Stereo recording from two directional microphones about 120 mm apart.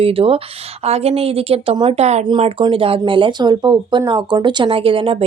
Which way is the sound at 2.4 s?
50° right (ahead or behind).